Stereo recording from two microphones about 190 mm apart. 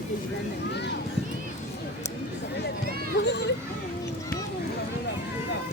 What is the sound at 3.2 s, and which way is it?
Children playing, 65° left (ahead or behind).